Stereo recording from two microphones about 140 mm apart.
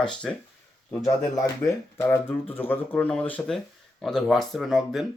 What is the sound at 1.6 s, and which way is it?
Speech, 15° left (ahead or behind).